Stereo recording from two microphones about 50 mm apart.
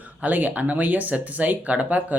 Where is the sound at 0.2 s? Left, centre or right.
Right.